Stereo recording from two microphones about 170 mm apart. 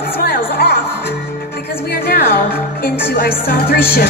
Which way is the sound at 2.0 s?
60° left (ahead or behind).